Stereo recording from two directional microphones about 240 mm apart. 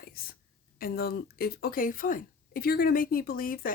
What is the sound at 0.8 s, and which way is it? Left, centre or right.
Speech, left.